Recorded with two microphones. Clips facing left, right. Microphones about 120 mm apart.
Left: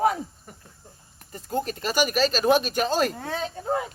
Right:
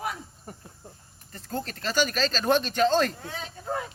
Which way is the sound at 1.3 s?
15° left (ahead or behind).